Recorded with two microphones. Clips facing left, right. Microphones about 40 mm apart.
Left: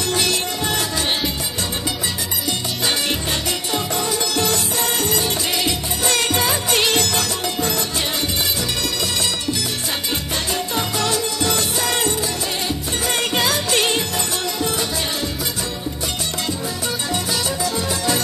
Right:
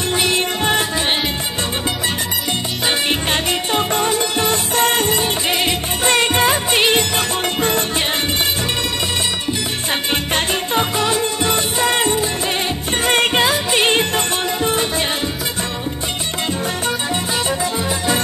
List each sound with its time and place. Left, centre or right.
0.1 s music: right
3.1 s music: right
7.4 s music: right
10.3 s music: right
13.0 s music: right
13.4 s music: right
13.8 s music: right